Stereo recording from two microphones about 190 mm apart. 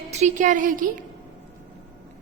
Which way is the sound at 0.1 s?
40° right (ahead or behind).